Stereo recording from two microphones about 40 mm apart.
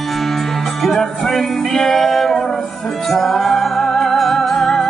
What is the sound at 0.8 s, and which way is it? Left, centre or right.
Music, centre.